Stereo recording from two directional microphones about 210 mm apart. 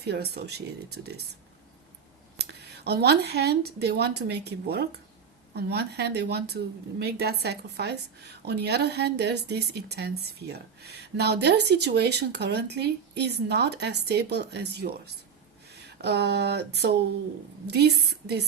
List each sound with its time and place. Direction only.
0.0 s a woman's voice: 50° right (ahead or behind)
2.4 s a woman's voice: 50° right (ahead or behind)